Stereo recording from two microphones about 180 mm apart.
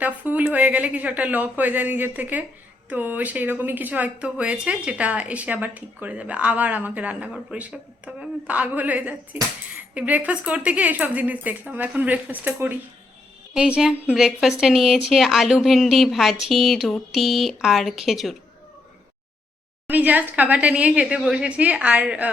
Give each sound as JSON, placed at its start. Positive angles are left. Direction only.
{"t": 0.0, "sound": "a woman's voice", "side_deg": -10}
{"t": 19.9, "sound": "speech", "side_deg": -10}